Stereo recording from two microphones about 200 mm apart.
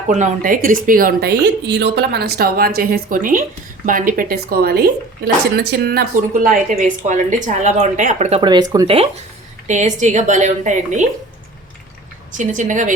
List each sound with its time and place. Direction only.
0.1 s speech: 35° right (ahead or behind); by 9.0 s 20° right (ahead or behind)
9.6 s speech: 35° right (ahead or behind)
12.4 s speech: 40° right (ahead or behind)